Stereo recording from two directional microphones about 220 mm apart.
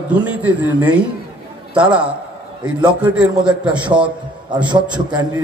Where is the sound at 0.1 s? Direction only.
5° right (ahead or behind).